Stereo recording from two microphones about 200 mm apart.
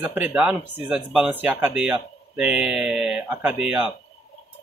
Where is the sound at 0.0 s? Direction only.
10° right (ahead or behind).